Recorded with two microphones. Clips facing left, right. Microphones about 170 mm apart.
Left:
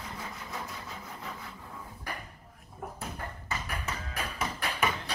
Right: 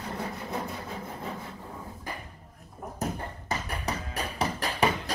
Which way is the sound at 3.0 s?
40° right (ahead or behind).